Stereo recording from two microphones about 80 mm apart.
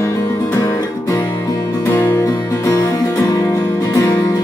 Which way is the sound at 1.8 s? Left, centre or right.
Left.